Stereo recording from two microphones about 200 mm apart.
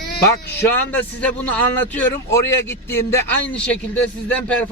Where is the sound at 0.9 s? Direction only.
10° left (ahead or behind).